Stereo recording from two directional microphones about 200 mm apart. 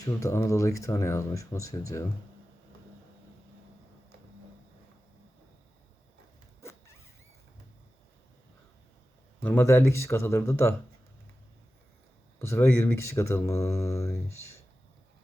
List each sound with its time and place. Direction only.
0.0 s speech: 15° left (ahead or behind)
6.6 s zipper: 15° left (ahead or behind)
9.4 s speech: 10° left (ahead or behind)
12.4 s speech: 10° left (ahead or behind)